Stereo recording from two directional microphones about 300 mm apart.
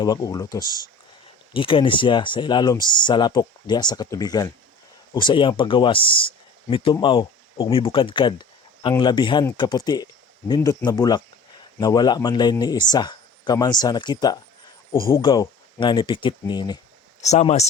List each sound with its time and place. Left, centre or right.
0.0 s speech: centre